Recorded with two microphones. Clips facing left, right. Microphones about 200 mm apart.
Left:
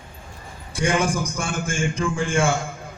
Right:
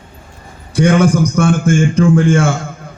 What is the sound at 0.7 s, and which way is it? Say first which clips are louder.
A man's voice: right 10 dB; 70° right (ahead or behind).